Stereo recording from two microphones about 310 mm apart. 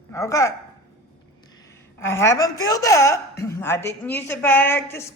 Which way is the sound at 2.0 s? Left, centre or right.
Centre.